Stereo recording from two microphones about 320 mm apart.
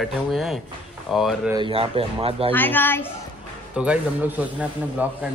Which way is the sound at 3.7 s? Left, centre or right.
Centre.